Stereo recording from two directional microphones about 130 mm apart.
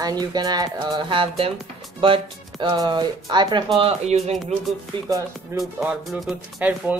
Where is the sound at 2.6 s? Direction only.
35° right (ahead or behind).